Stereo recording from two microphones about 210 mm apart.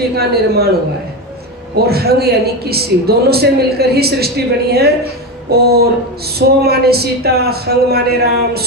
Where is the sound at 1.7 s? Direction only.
50° right (ahead or behind).